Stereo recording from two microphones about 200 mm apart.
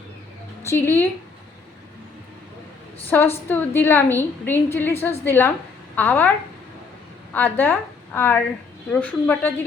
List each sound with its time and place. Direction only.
0.6 s speech: 10° left (ahead or behind)
3.1 s a woman's voice: 10° left (ahead or behind)
7.3 s a woman's voice: 10° left (ahead or behind)